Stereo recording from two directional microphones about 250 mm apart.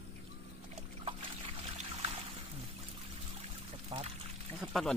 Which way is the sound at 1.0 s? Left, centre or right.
Right.